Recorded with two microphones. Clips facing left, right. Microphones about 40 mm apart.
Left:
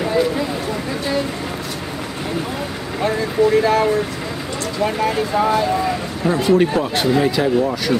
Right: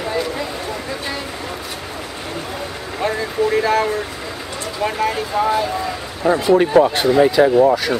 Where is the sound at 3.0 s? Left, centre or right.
Centre.